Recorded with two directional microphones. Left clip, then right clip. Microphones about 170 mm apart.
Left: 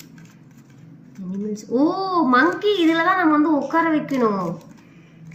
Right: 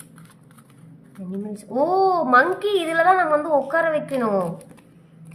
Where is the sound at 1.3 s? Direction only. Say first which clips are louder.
Left 2 dB; 90° right.